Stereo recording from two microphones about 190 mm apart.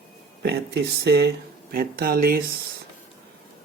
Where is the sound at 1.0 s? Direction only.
60° right (ahead or behind).